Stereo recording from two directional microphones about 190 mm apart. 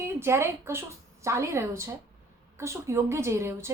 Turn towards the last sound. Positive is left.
turn(degrees=-15)  # may be behind; listen again after turning